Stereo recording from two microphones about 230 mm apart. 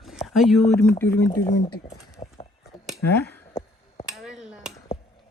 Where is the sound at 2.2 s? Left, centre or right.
Left.